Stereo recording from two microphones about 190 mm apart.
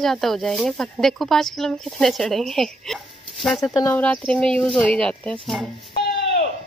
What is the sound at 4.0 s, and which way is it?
Speech, 5° left (ahead or behind).